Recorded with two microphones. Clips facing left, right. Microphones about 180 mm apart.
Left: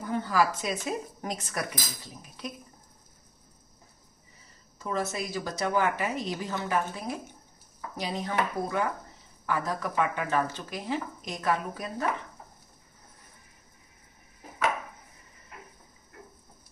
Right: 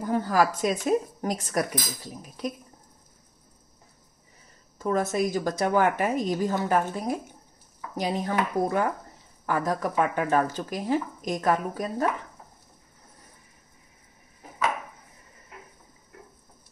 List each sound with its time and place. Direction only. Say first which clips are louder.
0.0 s speech: right 3 dB; 40° right (ahead or behind)
4.7 s speech: right 6 dB; 50° right (ahead or behind)